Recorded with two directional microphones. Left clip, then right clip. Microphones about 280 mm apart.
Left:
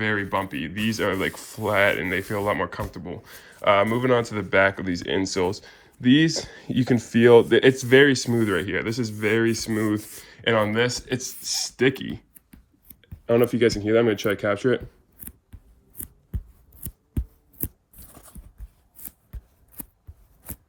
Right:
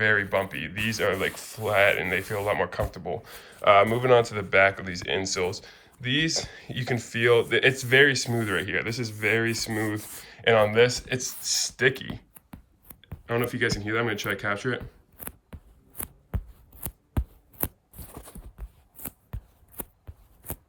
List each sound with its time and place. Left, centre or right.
0.0 s speech: centre
12.3 s clicking: centre
13.0 s speech: centre
18.1 s a sound: right